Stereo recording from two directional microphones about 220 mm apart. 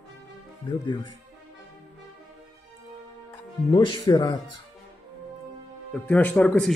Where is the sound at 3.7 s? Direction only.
20° left (ahead or behind).